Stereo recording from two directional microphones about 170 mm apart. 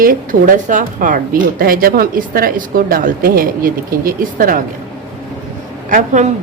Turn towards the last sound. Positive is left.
turn(degrees=-45)  # may be behind; listen again after turning